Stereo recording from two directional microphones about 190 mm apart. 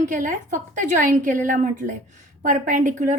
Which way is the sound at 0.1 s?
45° right (ahead or behind).